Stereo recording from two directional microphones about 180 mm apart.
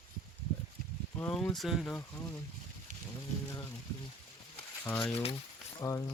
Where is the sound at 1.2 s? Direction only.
5° left (ahead or behind).